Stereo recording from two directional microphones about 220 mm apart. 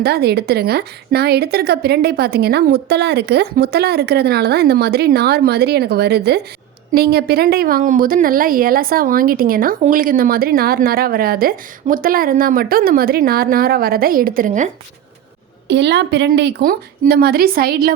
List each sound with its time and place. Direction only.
0.0 s a woman's voice: 45° right (ahead or behind)
15.6 s a woman's voice: 50° right (ahead or behind)